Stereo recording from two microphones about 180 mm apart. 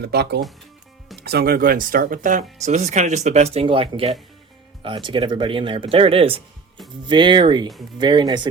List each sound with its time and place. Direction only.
0.0 s speech: 65° right (ahead or behind); by 8.4 s 25° right (ahead or behind)